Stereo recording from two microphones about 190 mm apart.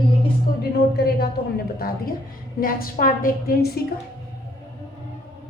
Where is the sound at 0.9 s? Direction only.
55° left (ahead or behind).